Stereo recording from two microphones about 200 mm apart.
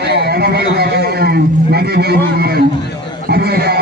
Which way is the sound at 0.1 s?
55° right (ahead or behind).